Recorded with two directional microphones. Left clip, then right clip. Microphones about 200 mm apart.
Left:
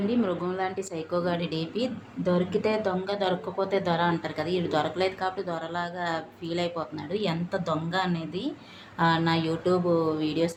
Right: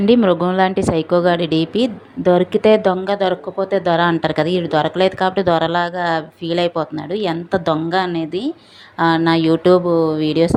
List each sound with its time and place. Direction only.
0.1 s a woman's voice: 40° right (ahead or behind)